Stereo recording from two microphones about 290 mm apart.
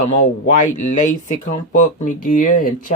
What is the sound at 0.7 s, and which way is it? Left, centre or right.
Speech, left.